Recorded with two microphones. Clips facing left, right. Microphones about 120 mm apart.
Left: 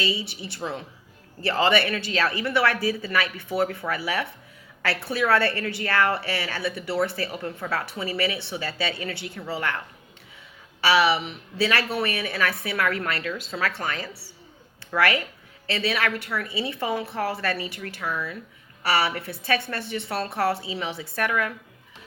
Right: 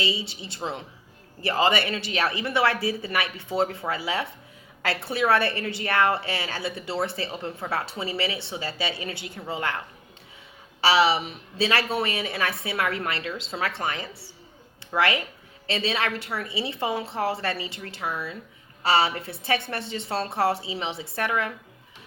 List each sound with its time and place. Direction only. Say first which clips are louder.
0.0 s a woman's voice: left 1 dB; 25° right (ahead or behind)